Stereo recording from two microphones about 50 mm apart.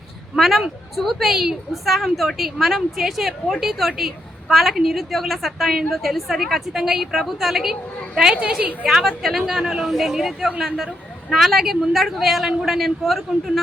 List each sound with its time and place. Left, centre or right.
0.3 s a woman's voice: centre